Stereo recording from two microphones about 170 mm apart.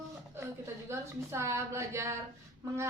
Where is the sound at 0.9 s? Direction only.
15° right (ahead or behind).